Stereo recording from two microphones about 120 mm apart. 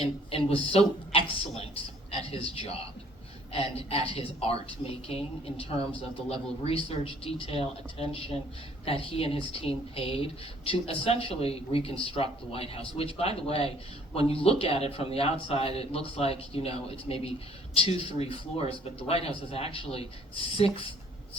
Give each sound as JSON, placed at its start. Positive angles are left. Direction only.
{"t": 0.0, "sound": "a man's voice", "side_deg": 55}
{"t": 6.7, "sound": "a man's voice", "side_deg": 50}